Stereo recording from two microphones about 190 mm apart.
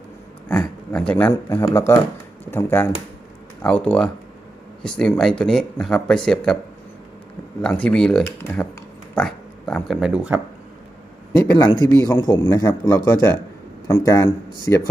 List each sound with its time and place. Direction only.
0.4 s a sound: 5° left (ahead or behind)
1.3 s speech: 15° left (ahead or behind)
7.6 s speech: 5° left (ahead or behind)
11.3 s a man's voice: 20° left (ahead or behind)
13.9 s speech: 15° left (ahead or behind)